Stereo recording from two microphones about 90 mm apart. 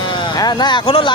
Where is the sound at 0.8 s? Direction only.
75° left (ahead or behind).